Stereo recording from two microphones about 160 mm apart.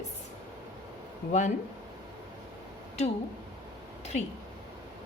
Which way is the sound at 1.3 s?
50° left (ahead or behind).